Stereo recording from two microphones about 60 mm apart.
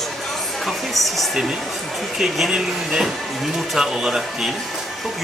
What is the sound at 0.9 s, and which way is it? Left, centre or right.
Speech, centre.